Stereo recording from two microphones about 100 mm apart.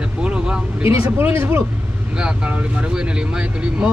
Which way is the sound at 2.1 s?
10° right (ahead or behind).